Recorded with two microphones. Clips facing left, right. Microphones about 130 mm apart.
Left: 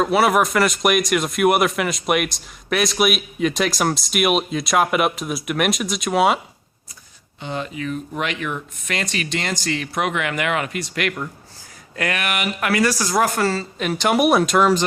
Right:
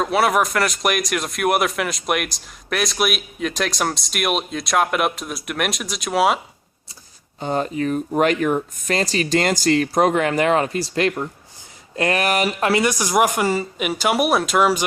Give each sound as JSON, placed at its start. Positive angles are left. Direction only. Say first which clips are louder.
{"t": 0.0, "sound": "speech", "louder": "left 1 dB", "side_deg": 0}
{"t": 7.3, "sound": "speech", "louder": "right 6 dB", "side_deg": -40}